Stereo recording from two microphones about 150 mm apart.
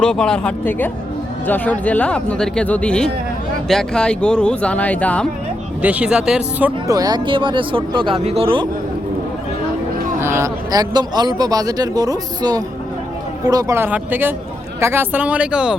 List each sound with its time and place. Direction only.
0.0 s speech: 5° left (ahead or behind)
5.8 s speech: 10° right (ahead or behind)
6.8 s speech: 25° right (ahead or behind)
10.2 s a man's voice: 15° right (ahead or behind)